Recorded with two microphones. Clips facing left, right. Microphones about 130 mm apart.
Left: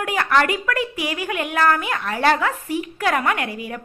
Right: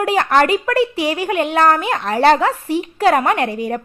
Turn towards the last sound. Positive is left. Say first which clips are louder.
# right 7 dB
turn(degrees=-35)  # may be behind; listen again after turning